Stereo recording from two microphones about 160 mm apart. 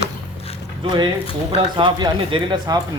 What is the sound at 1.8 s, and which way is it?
Speech, 30° right (ahead or behind).